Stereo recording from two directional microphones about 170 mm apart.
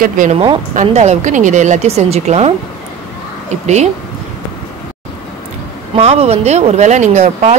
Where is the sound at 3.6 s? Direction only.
40° right (ahead or behind).